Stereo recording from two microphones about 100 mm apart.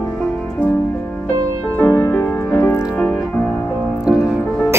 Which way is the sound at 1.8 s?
20° left (ahead or behind).